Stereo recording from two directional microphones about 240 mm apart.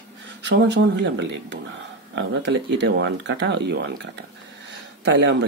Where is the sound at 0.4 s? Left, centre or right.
Right.